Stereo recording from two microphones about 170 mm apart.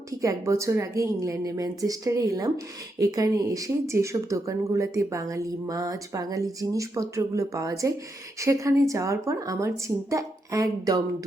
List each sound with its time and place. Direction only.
0.2 s speech: 20° right (ahead or behind)